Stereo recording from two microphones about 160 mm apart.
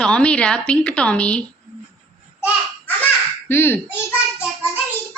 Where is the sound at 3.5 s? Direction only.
15° left (ahead or behind).